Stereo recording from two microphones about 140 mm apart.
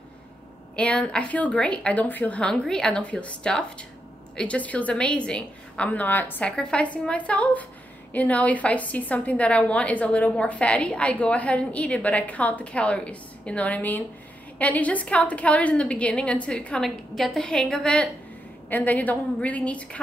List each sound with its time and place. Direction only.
0.7 s a woman's voice: 5° left (ahead or behind)